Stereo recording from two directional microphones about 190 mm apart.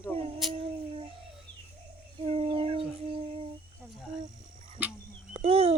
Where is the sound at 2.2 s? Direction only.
30° right (ahead or behind).